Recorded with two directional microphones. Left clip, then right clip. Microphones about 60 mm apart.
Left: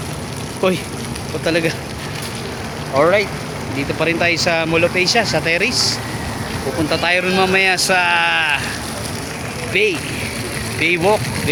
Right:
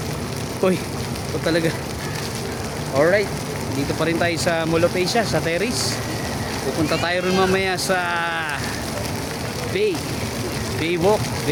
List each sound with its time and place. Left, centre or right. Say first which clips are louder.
0.6 s speech: left 3 dB; centre
1.5 s speech: left 3 dB; centre
3.0 s speech: left 3 dB; left
4.0 s speech: left 5 dB; left; by 6.0 s centre
6.9 s speech: left 6 dB; left
9.7 s speech: left 5 dB; left
10.8 s speech: left 7 dB; centre